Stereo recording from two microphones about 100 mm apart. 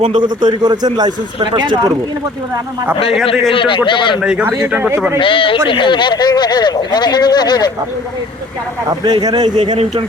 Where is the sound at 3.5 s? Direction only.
60° left (ahead or behind).